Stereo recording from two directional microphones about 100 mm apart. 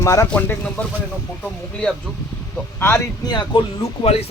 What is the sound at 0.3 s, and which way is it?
Speech, 15° left (ahead or behind).